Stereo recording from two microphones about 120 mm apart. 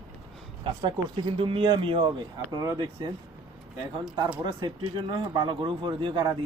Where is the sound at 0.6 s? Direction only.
45° right (ahead or behind).